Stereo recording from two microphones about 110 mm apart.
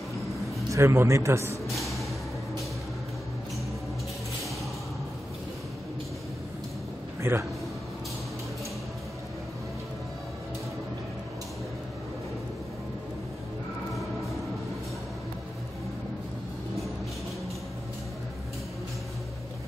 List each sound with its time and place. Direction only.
0.7 s a man's voice: 25° right (ahead or behind)
1.7 s music: centre (ahead or behind)
7.2 s a sound: 25° right (ahead or behind)